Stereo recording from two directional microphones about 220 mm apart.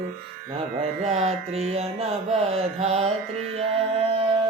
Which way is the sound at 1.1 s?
30° right (ahead or behind).